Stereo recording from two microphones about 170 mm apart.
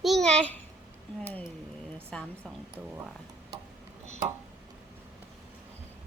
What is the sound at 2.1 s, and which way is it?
Speech, 5° left (ahead or behind).